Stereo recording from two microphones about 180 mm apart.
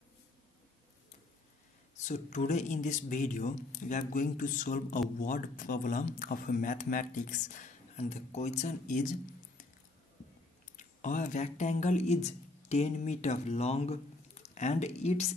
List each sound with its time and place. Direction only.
2.0 s speech: 40° left (ahead or behind)
10.8 s speech: 45° left (ahead or behind)